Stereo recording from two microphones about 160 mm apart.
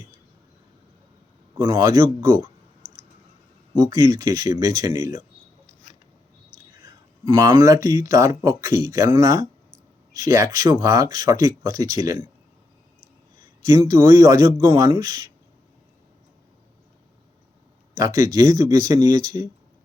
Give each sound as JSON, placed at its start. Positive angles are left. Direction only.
{"t": 1.5, "sound": "speech", "side_deg": -25}
{"t": 3.8, "sound": "speech", "side_deg": -25}
{"t": 6.8, "sound": "speech", "side_deg": -20}
{"t": 13.7, "sound": "speech", "side_deg": -20}
{"t": 17.9, "sound": "speech", "side_deg": -20}